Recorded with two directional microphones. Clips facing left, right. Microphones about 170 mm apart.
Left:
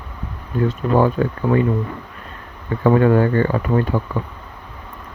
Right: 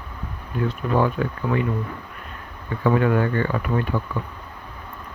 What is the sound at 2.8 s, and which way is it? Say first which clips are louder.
Speech: left 5 dB; 40° left (ahead or behind).